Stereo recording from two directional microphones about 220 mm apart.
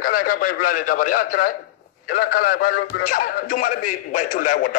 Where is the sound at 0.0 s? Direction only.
40° left (ahead or behind).